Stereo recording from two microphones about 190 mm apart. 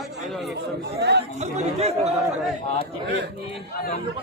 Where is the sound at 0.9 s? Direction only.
60° right (ahead or behind).